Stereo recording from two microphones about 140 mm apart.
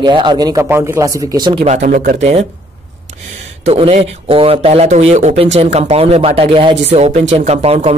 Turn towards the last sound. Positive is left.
turn(degrees=-45)  # may be behind; listen again after turning